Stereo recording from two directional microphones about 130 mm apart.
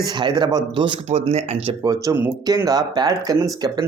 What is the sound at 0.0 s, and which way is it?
Speech, 35° right (ahead or behind).